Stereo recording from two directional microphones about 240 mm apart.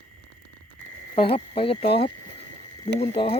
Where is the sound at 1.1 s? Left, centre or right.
Left.